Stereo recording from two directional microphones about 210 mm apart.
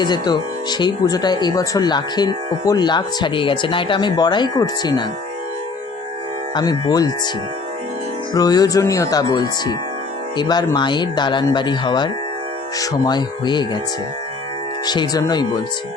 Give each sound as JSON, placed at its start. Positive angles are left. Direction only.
{"t": 0.0, "sound": "speech", "side_deg": 20}
{"t": 6.5, "sound": "speech", "side_deg": 20}
{"t": 8.3, "sound": "speech", "side_deg": 20}
{"t": 14.8, "sound": "speech", "side_deg": 20}